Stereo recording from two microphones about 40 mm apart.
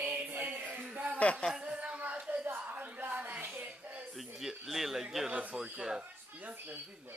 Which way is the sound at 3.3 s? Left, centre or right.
Right.